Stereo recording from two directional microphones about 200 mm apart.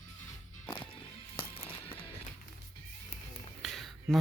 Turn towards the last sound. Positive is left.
turn(degrees=0)  # may be behind; listen again after turning